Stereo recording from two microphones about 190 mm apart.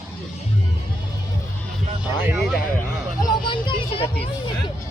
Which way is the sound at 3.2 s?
25° left (ahead or behind).